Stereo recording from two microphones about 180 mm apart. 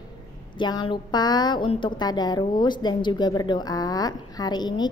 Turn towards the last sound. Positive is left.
turn(degrees=25)  # may be behind; listen again after turning